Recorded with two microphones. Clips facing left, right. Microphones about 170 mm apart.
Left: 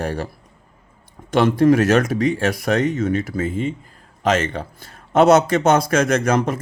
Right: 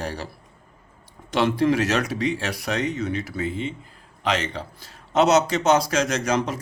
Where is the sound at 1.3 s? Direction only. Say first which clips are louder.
Left 6 dB; 50° left (ahead or behind).